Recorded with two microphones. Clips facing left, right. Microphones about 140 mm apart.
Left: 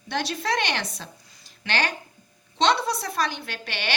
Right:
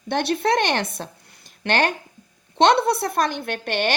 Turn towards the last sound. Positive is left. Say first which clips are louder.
# right 8 dB
turn(degrees=-50)  # may be behind; listen again after turning